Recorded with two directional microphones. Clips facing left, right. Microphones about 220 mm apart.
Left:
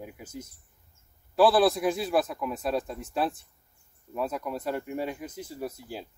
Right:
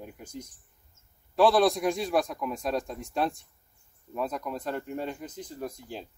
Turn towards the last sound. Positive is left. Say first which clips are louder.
# left 1 dB
turn(degrees=5)  # may be behind; listen again after turning